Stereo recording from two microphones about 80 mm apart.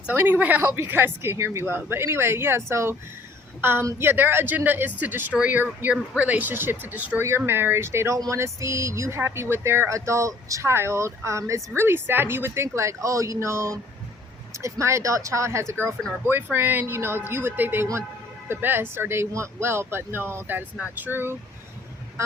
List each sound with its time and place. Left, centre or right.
0.1 s speech: right
7.2 s speech: right
16.2 s speech: right